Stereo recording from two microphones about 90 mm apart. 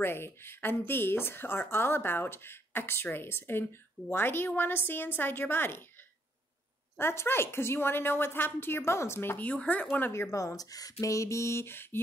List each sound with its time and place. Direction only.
0.0 s speech: 25° left (ahead or behind)
7.0 s speech: 25° left (ahead or behind)
9.4 s speech: 15° left (ahead or behind)